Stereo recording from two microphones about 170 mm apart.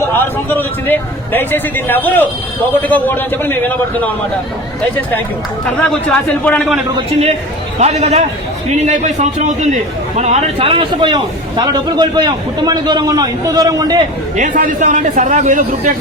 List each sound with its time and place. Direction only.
0.1 s a man's voice: 10° left (ahead or behind)
5.9 s a man's voice: 5° left (ahead or behind)
6.9 s a man's voice: 35° right (ahead or behind); by 14.0 s 20° right (ahead or behind)
14.3 s a man's voice: 50° right (ahead or behind)